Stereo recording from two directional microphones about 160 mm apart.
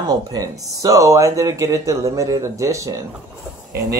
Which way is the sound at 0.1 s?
25° right (ahead or behind).